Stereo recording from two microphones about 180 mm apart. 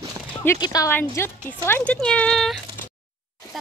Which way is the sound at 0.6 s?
15° left (ahead or behind).